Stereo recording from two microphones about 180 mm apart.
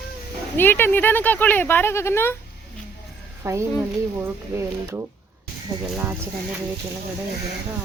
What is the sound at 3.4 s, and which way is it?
Speech, 15° right (ahead or behind).